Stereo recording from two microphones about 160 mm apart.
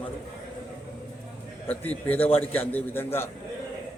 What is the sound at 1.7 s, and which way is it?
A man's voice, 10° left (ahead or behind).